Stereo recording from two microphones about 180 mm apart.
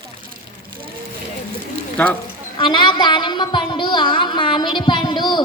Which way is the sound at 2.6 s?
25° left (ahead or behind).